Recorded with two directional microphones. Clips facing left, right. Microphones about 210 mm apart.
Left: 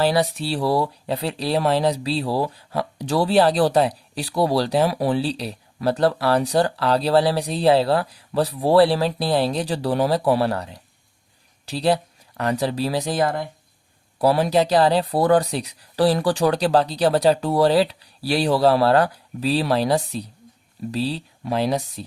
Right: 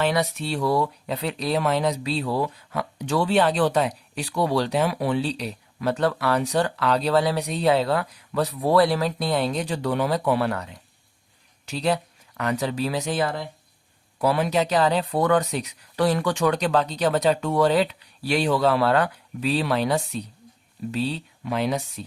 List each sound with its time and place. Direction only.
0.0 s speech: 35° left (ahead or behind); by 13.5 s 50° left (ahead or behind)
14.2 s speech: 35° left (ahead or behind)